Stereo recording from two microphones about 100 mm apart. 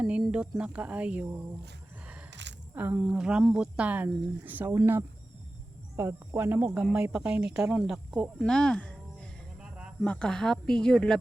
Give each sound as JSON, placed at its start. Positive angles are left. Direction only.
{"t": 0.0, "sound": "speech", "side_deg": -10}
{"t": 2.7, "sound": "speech", "side_deg": -20}
{"t": 3.0, "sound": "speech", "side_deg": -5}
{"t": 7.1, "sound": "speech", "side_deg": -10}
{"t": 8.4, "sound": "a sound", "side_deg": 5}
{"t": 9.6, "sound": "a sound", "side_deg": -10}
{"t": 10.0, "sound": "speech", "side_deg": 10}